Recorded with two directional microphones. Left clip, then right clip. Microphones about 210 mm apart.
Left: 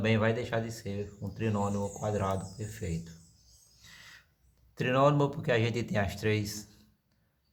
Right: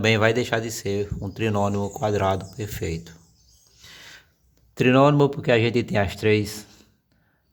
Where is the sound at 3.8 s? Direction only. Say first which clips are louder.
Right 8 dB; 40° right (ahead or behind).